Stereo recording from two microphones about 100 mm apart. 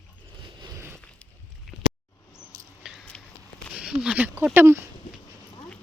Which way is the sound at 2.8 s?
5° right (ahead or behind).